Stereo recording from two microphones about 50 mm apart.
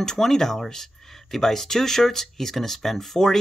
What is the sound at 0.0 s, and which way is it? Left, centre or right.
Speech, centre.